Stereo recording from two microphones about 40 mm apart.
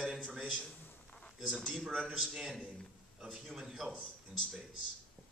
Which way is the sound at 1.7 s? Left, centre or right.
Centre.